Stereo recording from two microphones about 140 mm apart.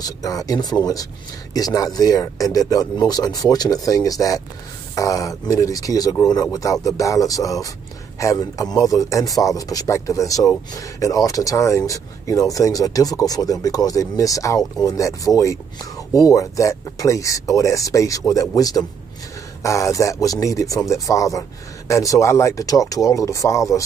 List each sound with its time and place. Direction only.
0.0 s speech: 25° left (ahead or behind)